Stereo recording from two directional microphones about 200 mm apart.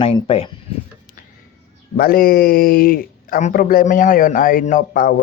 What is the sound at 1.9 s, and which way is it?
Speech, 45° left (ahead or behind).